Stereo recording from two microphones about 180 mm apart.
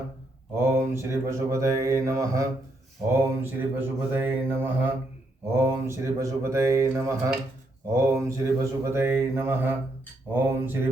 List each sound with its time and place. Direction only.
0.5 s mantra: 15° right (ahead or behind)